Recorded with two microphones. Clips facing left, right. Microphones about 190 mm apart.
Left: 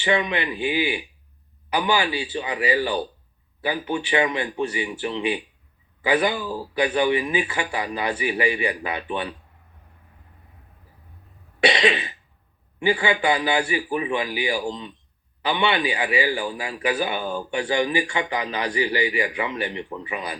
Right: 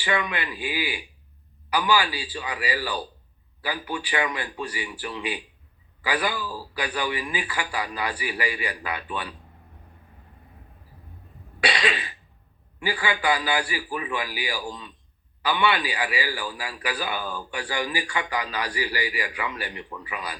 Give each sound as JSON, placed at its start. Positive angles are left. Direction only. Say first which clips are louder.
{"t": 0.0, "sound": "a man's voice", "louder": "left 5 dB", "side_deg": 25}
{"t": 11.6, "sound": "cough", "louder": "left 6 dB", "side_deg": 25}
{"t": 12.8, "sound": "a man's voice", "louder": "left 5 dB", "side_deg": 25}